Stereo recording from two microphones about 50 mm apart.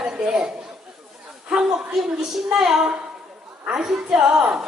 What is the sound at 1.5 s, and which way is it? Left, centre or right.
A woman's voice, centre.